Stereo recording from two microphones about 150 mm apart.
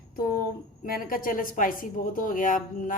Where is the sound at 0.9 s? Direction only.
70° left (ahead or behind).